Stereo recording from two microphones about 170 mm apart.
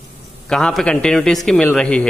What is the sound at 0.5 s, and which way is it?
Speech, 5° left (ahead or behind).